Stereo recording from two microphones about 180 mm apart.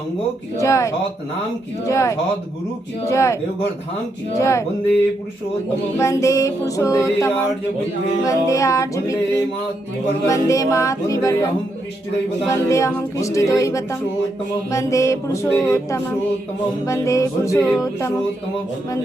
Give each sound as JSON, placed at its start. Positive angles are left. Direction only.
{"t": 0.5, "sound": "female singing", "side_deg": 15}
{"t": 4.4, "sound": "female singing", "side_deg": 15}
{"t": 6.0, "sound": "female singing", "side_deg": 15}
{"t": 10.2, "sound": "female singing", "side_deg": 15}
{"t": 12.5, "sound": "female singing", "side_deg": 15}
{"t": 17.7, "sound": "a sound", "side_deg": 20}